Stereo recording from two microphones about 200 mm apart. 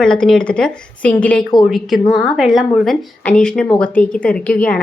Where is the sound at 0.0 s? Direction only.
5° left (ahead or behind).